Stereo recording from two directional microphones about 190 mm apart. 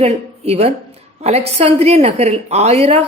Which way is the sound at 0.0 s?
35° right (ahead or behind).